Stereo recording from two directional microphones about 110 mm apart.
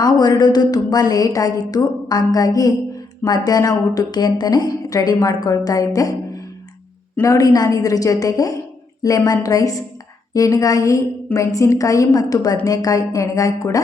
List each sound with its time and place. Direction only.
0.0 s a woman's voice: 40° left (ahead or behind)
7.2 s a woman's voice: 30° left (ahead or behind)